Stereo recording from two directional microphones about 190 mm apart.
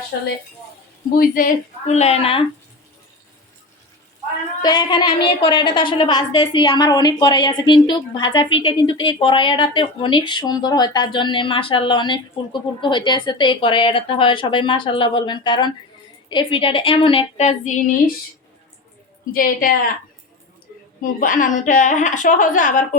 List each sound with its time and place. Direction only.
1.1 s a woman's voice: 50° left (ahead or behind); by 2.4 s 30° left (ahead or behind)
4.6 s speech: 20° left (ahead or behind)
19.3 s a woman's voice: 50° left (ahead or behind)
21.0 s a woman's voice: 45° left (ahead or behind)